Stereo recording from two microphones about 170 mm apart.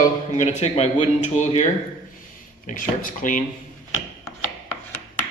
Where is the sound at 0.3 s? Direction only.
40° left (ahead or behind).